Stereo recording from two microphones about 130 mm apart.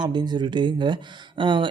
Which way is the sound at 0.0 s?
35° right (ahead or behind).